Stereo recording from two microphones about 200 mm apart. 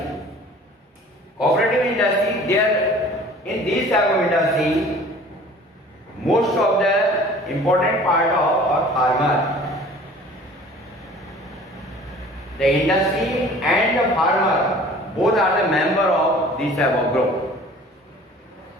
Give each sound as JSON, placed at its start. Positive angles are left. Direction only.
{"t": 1.4, "sound": "a sound", "side_deg": 0}
{"t": 3.9, "sound": "speech", "side_deg": 0}
{"t": 6.2, "sound": "a man's voice", "side_deg": 0}
{"t": 12.5, "sound": "speech", "side_deg": 0}